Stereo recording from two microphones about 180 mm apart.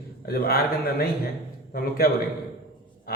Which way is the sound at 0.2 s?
55° left (ahead or behind).